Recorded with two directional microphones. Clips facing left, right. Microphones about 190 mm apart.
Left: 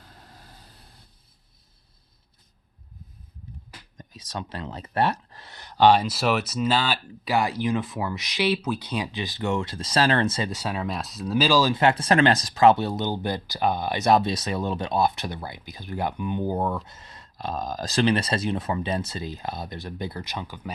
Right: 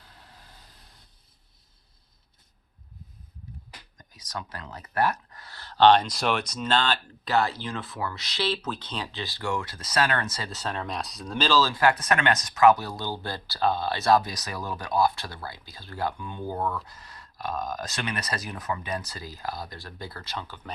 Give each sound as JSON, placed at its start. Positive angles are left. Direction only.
{"t": 3.9, "sound": "speech", "side_deg": 25}
{"t": 10.5, "sound": "speech", "side_deg": 10}